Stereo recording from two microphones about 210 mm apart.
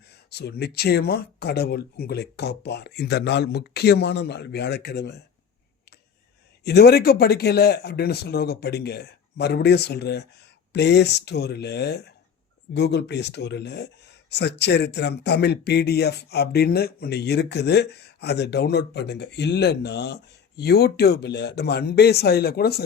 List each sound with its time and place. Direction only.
0.3 s speech: 50° left (ahead or behind)
6.7 s speech: 50° left (ahead or behind)